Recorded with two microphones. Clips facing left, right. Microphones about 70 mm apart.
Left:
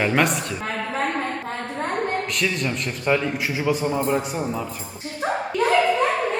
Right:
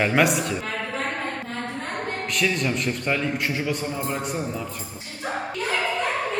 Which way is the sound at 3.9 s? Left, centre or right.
Left.